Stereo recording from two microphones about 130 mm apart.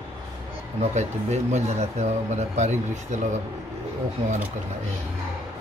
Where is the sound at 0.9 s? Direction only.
60° right (ahead or behind).